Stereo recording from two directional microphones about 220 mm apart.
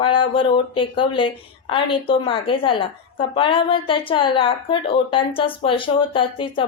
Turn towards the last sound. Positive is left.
turn(degrees=25)  # may be behind; listen again after turning